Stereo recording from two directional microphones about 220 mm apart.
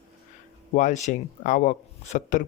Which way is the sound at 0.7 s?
35° left (ahead or behind).